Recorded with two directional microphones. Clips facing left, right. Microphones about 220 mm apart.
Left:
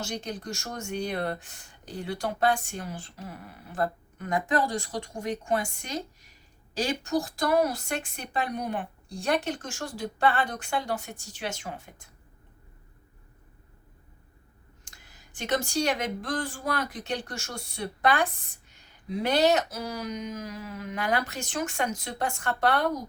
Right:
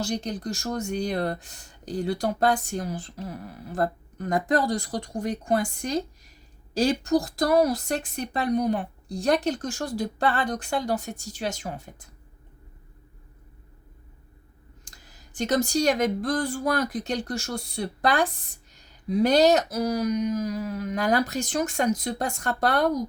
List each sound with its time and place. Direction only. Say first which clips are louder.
0.0 s speech: right 5 dB; 35° right (ahead or behind)
14.8 s speech: right 2 dB; 40° right (ahead or behind)